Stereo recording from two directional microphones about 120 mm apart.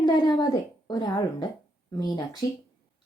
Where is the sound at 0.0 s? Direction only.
35° left (ahead or behind).